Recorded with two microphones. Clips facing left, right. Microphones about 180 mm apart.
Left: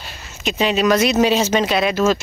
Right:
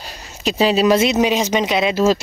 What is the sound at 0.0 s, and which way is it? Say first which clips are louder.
Speech: right 2 dB; 35° right (ahead or behind).